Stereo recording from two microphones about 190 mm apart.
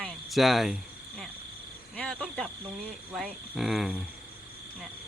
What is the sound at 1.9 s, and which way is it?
Speech, 5° left (ahead or behind).